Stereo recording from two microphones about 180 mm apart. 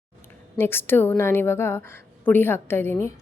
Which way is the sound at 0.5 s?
10° left (ahead or behind).